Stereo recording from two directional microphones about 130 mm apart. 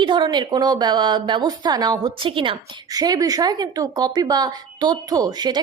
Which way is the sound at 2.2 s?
45° right (ahead or behind).